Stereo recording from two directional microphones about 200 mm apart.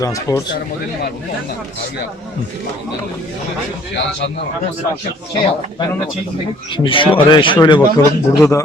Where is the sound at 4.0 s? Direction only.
65° left (ahead or behind).